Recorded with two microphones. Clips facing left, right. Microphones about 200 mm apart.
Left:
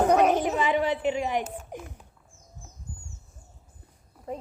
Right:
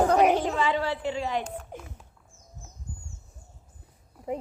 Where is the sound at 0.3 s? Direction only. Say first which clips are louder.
Left 1 dB; 20° left (ahead or behind).